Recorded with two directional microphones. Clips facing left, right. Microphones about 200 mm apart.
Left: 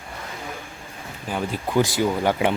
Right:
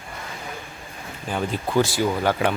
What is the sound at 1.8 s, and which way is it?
Speech, 20° left (ahead or behind).